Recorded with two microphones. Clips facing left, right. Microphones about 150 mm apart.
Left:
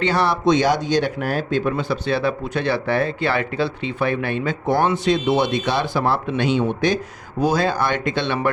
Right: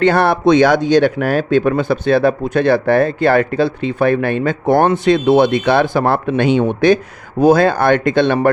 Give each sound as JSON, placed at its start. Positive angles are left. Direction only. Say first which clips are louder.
{"t": 0.0, "sound": "speech", "louder": "right 6 dB", "side_deg": -55}